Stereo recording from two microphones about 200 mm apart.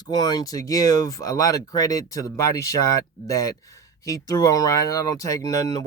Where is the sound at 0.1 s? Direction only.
20° left (ahead or behind).